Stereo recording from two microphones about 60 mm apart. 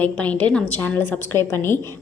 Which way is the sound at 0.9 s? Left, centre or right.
Left.